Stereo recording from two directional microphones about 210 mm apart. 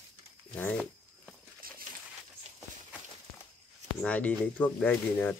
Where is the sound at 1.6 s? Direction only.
45° right (ahead or behind).